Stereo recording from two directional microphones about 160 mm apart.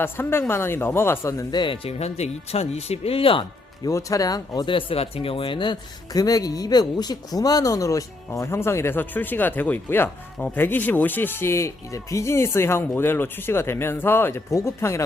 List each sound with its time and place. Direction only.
0.0 s speech: 15° left (ahead or behind); by 3.4 s 35° left (ahead or behind)
3.8 s speech: 20° left (ahead or behind)